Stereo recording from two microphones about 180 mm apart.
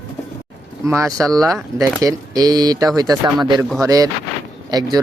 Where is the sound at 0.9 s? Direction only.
15° right (ahead or behind).